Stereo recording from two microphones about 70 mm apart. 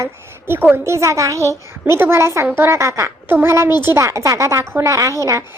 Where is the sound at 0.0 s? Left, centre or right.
Right.